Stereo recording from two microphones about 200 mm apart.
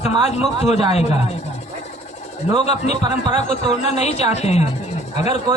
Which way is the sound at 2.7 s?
35° left (ahead or behind).